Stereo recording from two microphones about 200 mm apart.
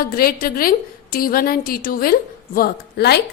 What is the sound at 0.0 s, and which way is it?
A woman's voice, 50° left (ahead or behind).